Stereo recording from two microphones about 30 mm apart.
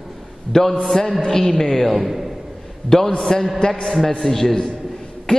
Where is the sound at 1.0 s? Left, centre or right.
Left.